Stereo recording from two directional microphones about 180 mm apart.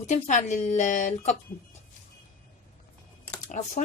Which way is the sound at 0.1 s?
40° left (ahead or behind).